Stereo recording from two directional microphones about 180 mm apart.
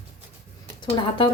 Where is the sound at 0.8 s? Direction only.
25° left (ahead or behind).